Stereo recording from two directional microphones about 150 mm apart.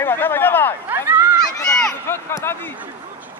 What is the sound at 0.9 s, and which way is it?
Speech, 15° right (ahead or behind).